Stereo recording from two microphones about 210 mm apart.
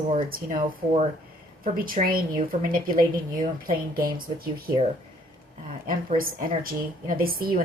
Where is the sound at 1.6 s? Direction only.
40° right (ahead or behind).